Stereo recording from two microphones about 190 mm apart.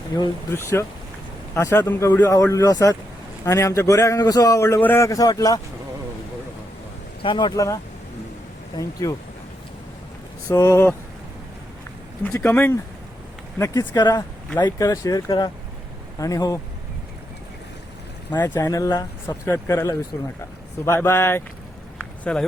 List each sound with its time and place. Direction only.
0.1 s a man's voice: 20° left (ahead or behind)
7.2 s a man's voice: 25° left (ahead or behind)
10.5 s a man's voice: 15° left (ahead or behind)
12.2 s a man's voice: 10° left (ahead or behind)
18.5 s a man's voice: 20° left (ahead or behind)
21.9 s a sound: 5° left (ahead or behind)